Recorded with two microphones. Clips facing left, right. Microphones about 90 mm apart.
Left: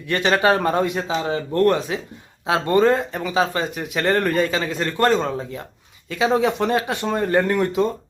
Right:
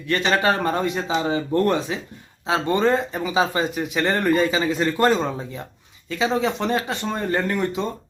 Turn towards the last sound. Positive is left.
turn(degrees=5)  # may be behind; listen again after turning